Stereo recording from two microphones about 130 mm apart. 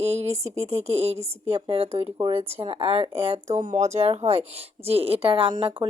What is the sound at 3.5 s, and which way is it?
Speech, 75° right (ahead or behind).